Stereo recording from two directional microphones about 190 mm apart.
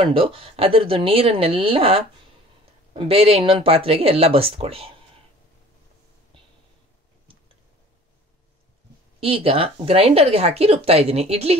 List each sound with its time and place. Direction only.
0.0 s speech: 30° right (ahead or behind)
9.2 s speech: 30° right (ahead or behind)